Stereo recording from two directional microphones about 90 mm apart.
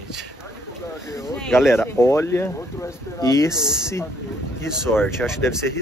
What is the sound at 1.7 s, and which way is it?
Speech, 30° left (ahead or behind).